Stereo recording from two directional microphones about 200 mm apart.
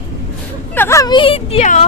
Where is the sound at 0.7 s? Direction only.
10° left (ahead or behind); by 1.8 s 35° left (ahead or behind).